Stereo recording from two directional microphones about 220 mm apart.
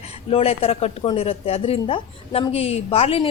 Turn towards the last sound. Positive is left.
turn(degrees=25)  # may be behind; listen again after turning